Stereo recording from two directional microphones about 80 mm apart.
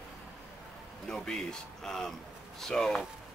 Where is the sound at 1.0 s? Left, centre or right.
Centre.